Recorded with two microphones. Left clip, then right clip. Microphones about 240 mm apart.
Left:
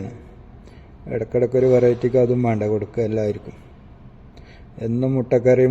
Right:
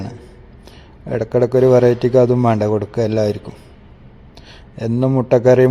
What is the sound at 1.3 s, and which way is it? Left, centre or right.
Speech, right.